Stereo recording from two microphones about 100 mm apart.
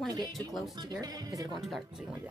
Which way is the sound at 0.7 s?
45° right (ahead or behind).